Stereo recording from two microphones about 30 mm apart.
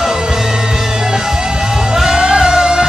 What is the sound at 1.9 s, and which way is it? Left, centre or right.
Music, centre.